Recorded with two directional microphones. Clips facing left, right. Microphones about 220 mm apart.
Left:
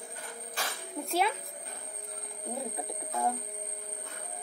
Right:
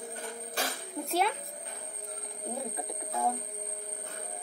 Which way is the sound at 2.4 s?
Centre (ahead or behind).